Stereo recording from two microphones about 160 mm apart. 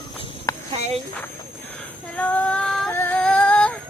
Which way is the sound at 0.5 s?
20° left (ahead or behind).